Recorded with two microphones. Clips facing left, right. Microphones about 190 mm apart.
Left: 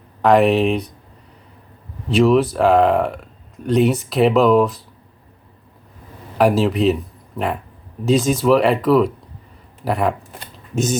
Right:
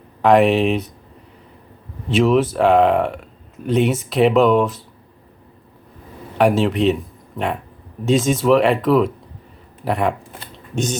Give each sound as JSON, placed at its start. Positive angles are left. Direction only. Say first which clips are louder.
{"t": 0.2, "sound": "speech", "louder": "even", "side_deg": 0}
{"t": 2.0, "sound": "speech", "louder": "left 1 dB", "side_deg": 0}
{"t": 6.3, "sound": "speech", "louder": "even", "side_deg": 0}